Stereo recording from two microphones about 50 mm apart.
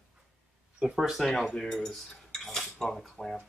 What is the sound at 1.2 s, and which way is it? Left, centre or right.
Speech, centre.